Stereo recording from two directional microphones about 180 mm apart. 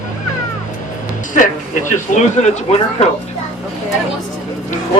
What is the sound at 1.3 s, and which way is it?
Speech, 45° left (ahead or behind).